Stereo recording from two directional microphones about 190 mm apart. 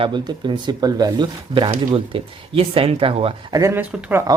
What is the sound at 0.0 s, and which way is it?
Speech, 25° right (ahead or behind).